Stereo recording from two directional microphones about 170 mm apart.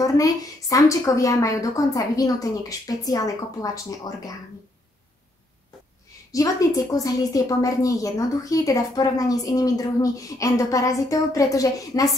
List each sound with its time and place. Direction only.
0.0 s a woman's voice: 20° left (ahead or behind)
6.3 s a woman's voice: 20° left (ahead or behind)